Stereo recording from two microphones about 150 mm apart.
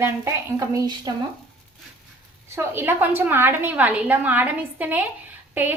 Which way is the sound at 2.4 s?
15° right (ahead or behind).